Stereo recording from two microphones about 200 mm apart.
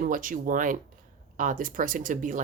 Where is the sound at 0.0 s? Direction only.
40° right (ahead or behind).